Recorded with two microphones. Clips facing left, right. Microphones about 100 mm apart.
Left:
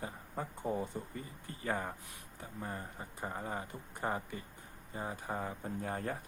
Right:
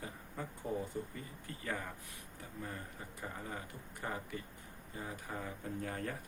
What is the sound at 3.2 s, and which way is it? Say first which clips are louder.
Speech: left 5 dB; 35° left (ahead or behind).